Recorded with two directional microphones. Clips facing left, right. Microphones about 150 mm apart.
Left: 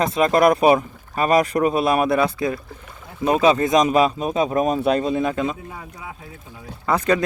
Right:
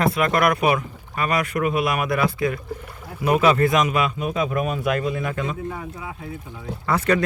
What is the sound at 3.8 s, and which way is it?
A man's voice, 35° left (ahead or behind).